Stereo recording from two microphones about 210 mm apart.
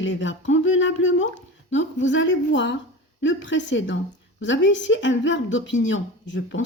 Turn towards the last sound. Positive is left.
turn(degrees=60)  # may be behind; listen again after turning